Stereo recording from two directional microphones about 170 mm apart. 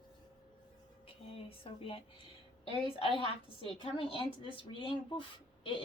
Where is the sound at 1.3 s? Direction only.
35° left (ahead or behind).